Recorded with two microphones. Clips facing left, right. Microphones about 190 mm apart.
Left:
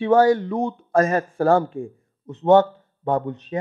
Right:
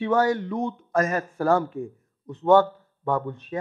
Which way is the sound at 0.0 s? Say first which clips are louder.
Left 6 dB; 30° left (ahead or behind).